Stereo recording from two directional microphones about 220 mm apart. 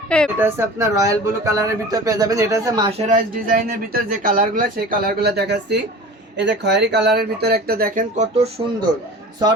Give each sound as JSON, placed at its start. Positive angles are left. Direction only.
{"t": 0.3, "sound": "speech", "side_deg": -10}
{"t": 3.1, "sound": "speech", "side_deg": -40}